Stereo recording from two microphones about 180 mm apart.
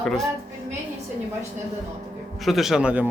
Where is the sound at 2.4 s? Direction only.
Centre (ahead or behind).